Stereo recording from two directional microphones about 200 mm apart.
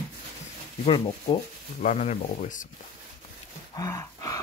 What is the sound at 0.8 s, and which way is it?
Speech, 25° left (ahead or behind).